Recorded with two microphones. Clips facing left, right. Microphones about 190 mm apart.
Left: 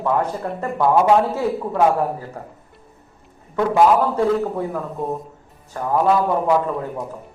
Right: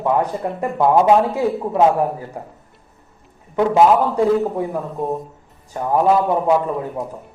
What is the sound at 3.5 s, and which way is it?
A man's voice, 15° right (ahead or behind).